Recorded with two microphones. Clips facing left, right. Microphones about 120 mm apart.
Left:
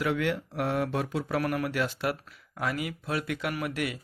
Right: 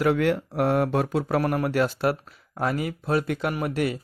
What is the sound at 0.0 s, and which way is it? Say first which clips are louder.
Speech: right 6 dB; 45° right (ahead or behind).